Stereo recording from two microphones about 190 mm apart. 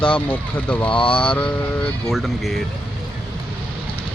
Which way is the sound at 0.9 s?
25° left (ahead or behind).